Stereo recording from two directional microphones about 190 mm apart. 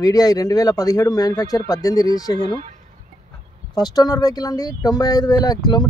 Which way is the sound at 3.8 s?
20° left (ahead or behind).